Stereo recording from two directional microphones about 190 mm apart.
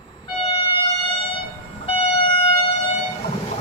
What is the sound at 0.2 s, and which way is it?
Train, 25° left (ahead or behind).